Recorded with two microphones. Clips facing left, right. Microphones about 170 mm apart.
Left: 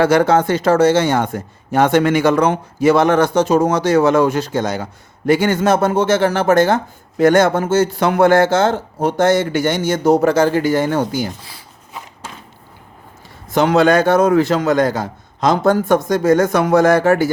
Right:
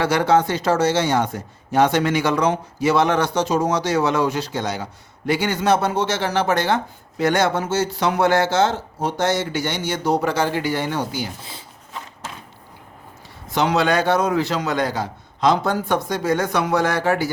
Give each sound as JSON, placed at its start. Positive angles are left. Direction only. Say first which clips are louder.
{"t": 0.0, "sound": "speech", "louder": "left 5 dB", "side_deg": 50}
{"t": 13.5, "sound": "speech", "louder": "left 6 dB", "side_deg": 50}